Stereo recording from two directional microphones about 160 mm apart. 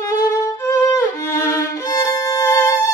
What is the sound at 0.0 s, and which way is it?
Violin, 20° left (ahead or behind).